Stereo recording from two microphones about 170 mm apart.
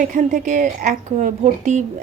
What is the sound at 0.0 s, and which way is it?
A woman's voice, 50° right (ahead or behind).